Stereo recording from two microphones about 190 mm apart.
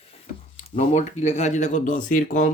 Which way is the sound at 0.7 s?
40° left (ahead or behind).